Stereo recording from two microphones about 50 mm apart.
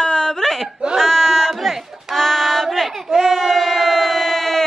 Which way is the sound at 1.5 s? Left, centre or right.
Centre.